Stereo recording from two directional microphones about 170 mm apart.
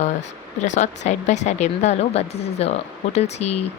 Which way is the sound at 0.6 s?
45° left (ahead or behind).